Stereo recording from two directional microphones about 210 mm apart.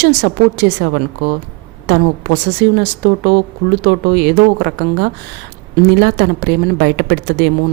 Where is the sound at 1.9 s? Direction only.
50° right (ahead or behind).